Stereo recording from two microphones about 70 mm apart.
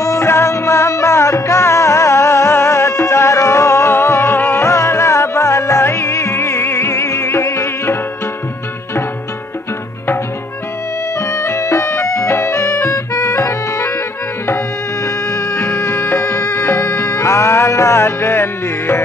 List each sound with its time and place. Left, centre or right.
0.0 s music: left
11.1 s music: left
15.0 s music: left